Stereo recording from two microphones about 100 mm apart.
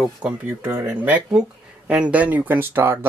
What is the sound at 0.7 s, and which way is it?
Speech, 20° right (ahead or behind).